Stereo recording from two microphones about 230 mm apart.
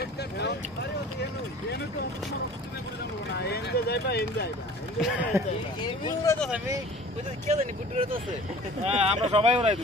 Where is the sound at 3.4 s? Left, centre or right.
Left.